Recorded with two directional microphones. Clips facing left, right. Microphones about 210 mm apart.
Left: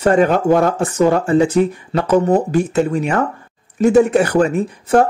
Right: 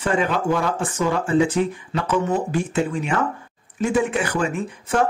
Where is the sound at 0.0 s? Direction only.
40° left (ahead or behind).